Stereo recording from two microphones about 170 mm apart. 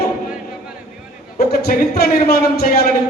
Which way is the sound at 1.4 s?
65° left (ahead or behind).